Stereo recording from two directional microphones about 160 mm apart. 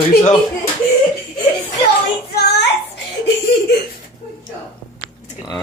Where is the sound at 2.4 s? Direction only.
90° left.